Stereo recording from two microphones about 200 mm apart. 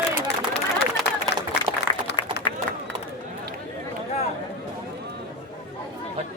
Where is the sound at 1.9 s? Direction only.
5° right (ahead or behind).